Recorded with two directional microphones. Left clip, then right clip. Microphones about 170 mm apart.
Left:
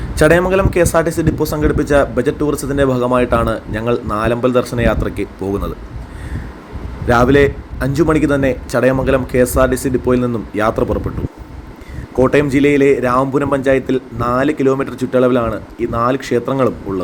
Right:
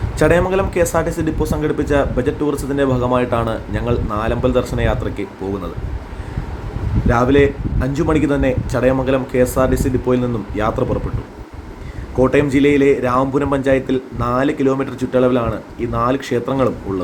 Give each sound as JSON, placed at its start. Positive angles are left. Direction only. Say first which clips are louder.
{"t": 0.2, "sound": "speech", "louder": "left 3 dB", "side_deg": 20}
{"t": 7.1, "sound": "speech", "louder": "left 3 dB", "side_deg": 25}
{"t": 12.1, "sound": "speech", "louder": "left 2 dB", "side_deg": 25}